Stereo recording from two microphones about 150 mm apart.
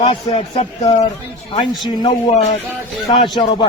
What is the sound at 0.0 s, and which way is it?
Speech, 40° left (ahead or behind).